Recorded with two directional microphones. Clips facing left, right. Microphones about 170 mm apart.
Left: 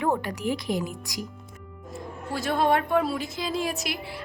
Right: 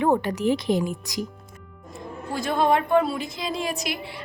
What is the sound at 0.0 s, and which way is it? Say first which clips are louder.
A woman's voice: right 5 dB; 25° right (ahead or behind).